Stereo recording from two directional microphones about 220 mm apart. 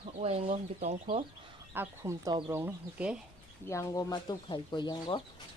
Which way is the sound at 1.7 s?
15° right (ahead or behind).